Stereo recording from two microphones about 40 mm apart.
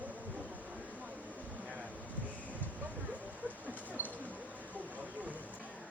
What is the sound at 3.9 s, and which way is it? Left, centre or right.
Single-lens reflex camera, right.